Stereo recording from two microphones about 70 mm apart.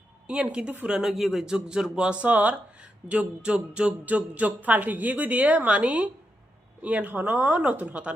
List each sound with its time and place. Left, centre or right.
0.3 s a woman's voice: centre
0.9 s speech: centre